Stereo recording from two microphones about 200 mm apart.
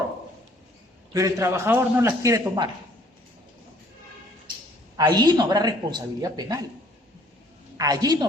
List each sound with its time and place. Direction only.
1.1 s a man's voice: 15° right (ahead or behind)
4.9 s speech: 20° right (ahead or behind)
7.8 s speech: 20° right (ahead or behind)